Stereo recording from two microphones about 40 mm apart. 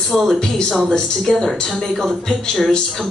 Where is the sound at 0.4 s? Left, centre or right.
Centre.